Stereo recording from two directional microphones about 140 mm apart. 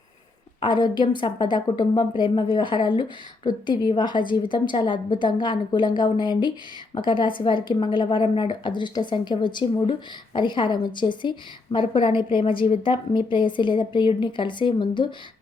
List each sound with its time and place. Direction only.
0.6 s a woman's voice: 35° left (ahead or behind)